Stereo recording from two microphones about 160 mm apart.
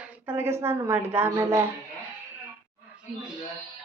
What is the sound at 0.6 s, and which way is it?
A woman's voice, 15° right (ahead or behind).